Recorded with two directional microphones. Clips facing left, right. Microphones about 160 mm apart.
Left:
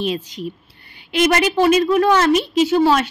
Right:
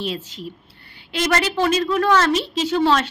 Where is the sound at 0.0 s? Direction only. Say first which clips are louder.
Left 5 dB; 15° left (ahead or behind).